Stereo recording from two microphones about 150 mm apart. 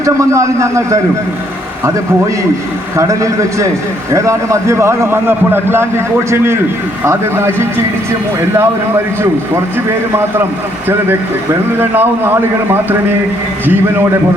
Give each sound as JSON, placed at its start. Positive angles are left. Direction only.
{"t": 0.0, "sound": "a man's voice", "side_deg": -20}
{"t": 2.9, "sound": "a man's voice", "side_deg": -20}
{"t": 11.8, "sound": "a man's voice", "side_deg": -15}